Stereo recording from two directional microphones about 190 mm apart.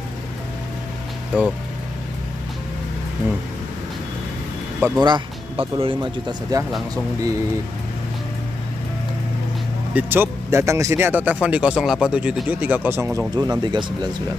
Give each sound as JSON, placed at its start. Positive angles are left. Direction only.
{"t": 1.3, "sound": "speech", "side_deg": -5}
{"t": 4.7, "sound": "speech", "side_deg": -5}
{"t": 5.0, "sound": "speech", "side_deg": -25}
{"t": 9.9, "sound": "speech", "side_deg": -10}